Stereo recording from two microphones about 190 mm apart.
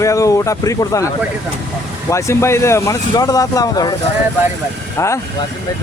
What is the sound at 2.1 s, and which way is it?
Speech, 15° left (ahead or behind).